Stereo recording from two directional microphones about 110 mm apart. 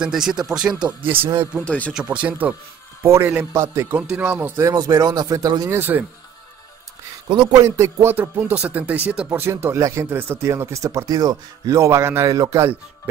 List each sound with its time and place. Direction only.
0.0 s speech: 5° right (ahead or behind)
1.3 s speech: 20° right (ahead or behind)
1.6 s speech: 10° left (ahead or behind)
2.0 s speech: 15° right (ahead or behind)
3.0 s a man's voice: 25° right (ahead or behind)
3.3 s speech: 15° right (ahead or behind)
4.6 s speech: 35° right (ahead or behind)
5.7 s speech: 20° right (ahead or behind)
7.6 s speech: 25° right (ahead or behind)